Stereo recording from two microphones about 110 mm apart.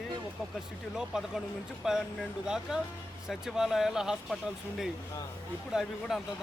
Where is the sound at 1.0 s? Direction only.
5° right (ahead or behind).